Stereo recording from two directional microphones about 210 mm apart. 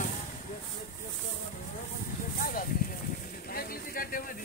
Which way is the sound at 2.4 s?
40° left (ahead or behind).